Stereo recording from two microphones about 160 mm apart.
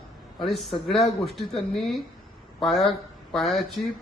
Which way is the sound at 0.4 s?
Centre (ahead or behind).